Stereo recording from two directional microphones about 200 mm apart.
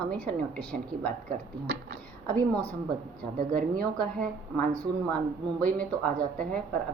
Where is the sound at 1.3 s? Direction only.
50° right (ahead or behind).